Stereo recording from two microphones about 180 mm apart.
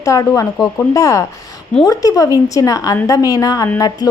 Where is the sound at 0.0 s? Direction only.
20° left (ahead or behind).